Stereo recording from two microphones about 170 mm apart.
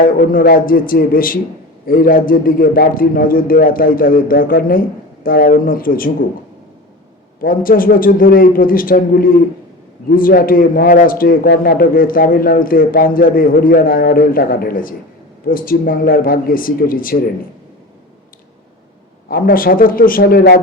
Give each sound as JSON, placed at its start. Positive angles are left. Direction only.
{"t": 0.0, "sound": "a man's voice", "side_deg": 55}
{"t": 7.3, "sound": "a man's voice", "side_deg": 55}
{"t": 19.3, "sound": "a man's voice", "side_deg": 55}